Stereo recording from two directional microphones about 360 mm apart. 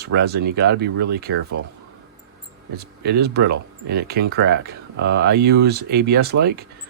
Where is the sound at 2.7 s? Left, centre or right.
Right.